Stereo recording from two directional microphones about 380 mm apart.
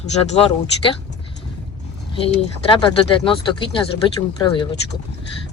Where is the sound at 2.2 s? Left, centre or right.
Centre.